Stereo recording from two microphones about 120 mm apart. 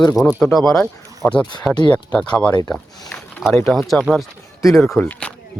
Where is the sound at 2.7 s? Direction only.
10° left (ahead or behind).